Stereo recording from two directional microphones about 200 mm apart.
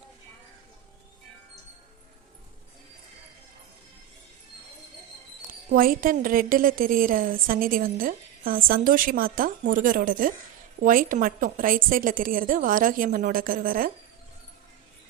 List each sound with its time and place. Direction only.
5.7 s a woman's voice: 45° right (ahead or behind)